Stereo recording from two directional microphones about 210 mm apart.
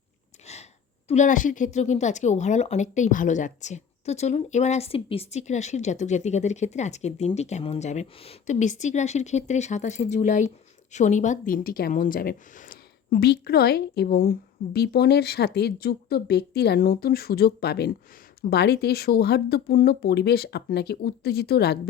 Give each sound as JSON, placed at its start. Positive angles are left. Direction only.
{"t": 0.4, "sound": "a woman's voice", "side_deg": 30}